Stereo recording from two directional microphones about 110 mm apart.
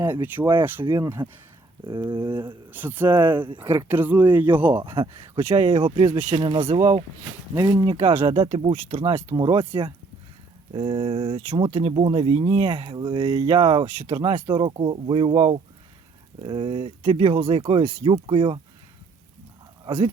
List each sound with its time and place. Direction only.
0.0 s speech: 20° right (ahead or behind)
1.9 s speech: 45° right (ahead or behind)
2.6 s speech: 15° right (ahead or behind)
4.8 s speech: 50° right (ahead or behind)
6.7 s speech: 30° right (ahead or behind)
8.2 s speech: 55° right (ahead or behind)
19.8 s speech: 45° right (ahead or behind)